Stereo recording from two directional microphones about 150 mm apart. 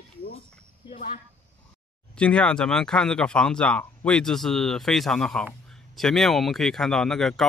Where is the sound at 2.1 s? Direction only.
5° left (ahead or behind).